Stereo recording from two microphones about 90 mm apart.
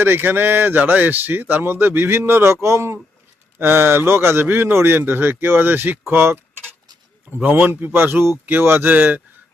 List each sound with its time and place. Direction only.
0.0 s a man's voice: 25° right (ahead or behind)
7.4 s a man's voice: 20° right (ahead or behind)